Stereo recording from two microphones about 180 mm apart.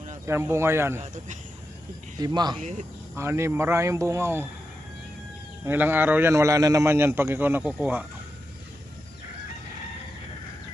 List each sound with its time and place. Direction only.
0.3 s a man's voice: 15° right (ahead or behind)
1.0 s speech: 45° right (ahead or behind)
2.2 s a man's voice: 25° right (ahead or behind)
5.6 s a man's voice: 10° right (ahead or behind)